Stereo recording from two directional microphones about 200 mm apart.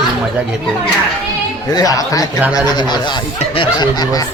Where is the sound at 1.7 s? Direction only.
20° left (ahead or behind).